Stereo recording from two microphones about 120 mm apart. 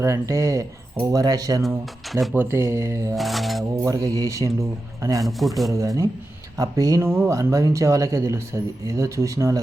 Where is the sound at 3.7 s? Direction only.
30° right (ahead or behind).